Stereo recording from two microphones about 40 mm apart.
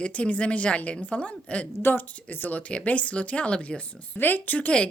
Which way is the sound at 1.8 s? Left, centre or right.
Left.